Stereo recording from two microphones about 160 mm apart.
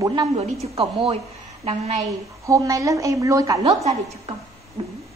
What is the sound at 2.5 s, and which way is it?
A woman's voice, 20° right (ahead or behind).